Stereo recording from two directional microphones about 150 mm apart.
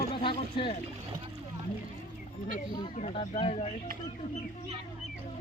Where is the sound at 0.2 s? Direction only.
35° left (ahead or behind).